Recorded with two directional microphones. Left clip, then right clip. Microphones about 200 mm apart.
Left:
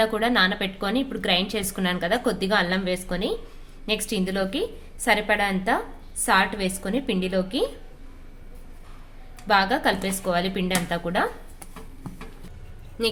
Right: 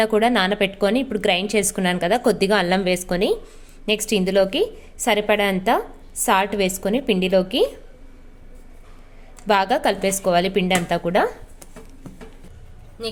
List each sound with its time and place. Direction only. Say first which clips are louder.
0.0 s a woman's voice: right 3 dB; 40° right (ahead or behind)
9.5 s a woman's voice: right 3 dB; 45° right (ahead or behind)